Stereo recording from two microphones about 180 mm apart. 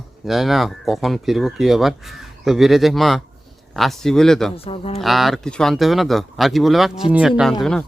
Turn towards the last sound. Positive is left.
turn(degrees=0)  # may be behind; listen again after turning